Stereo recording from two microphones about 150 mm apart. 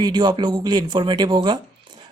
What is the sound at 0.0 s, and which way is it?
A man's voice, 25° right (ahead or behind).